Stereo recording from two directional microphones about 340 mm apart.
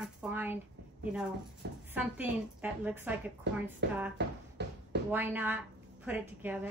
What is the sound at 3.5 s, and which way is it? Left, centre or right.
Speech, right.